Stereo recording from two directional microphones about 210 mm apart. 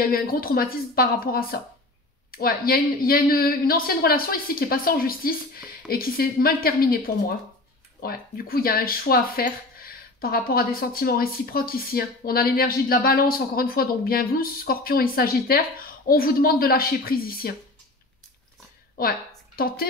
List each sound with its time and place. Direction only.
0.0 s speech: 45° left (ahead or behind)
18.9 s a woman's voice: 45° left (ahead or behind)